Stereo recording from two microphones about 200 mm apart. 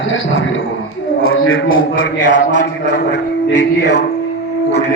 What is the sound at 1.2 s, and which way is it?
Speech, 90° left.